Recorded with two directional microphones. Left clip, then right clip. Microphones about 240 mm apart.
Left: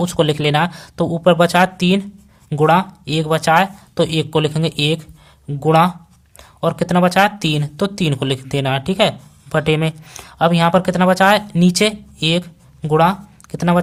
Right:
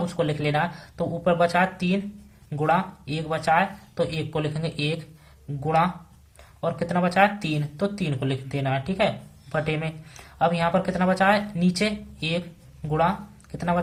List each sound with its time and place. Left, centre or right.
0.0 s speech: left